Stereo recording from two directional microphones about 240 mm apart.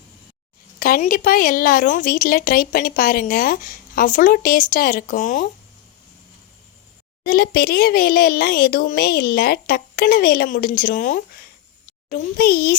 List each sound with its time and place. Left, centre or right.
0.8 s a woman's voice: left
7.3 s a woman's voice: left